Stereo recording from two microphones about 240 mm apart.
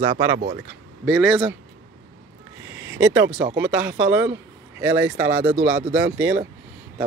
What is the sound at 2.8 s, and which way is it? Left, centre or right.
Speech, centre.